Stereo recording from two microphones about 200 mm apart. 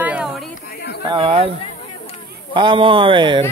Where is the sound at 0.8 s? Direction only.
55° left (ahead or behind).